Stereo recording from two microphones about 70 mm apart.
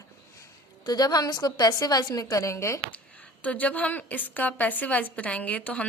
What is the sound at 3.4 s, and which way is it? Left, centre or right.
A woman's voice, left.